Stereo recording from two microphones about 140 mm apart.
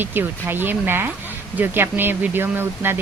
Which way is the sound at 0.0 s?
15° right (ahead or behind).